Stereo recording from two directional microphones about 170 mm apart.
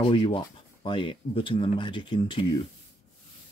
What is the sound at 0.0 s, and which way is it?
Speech, 30° left (ahead or behind).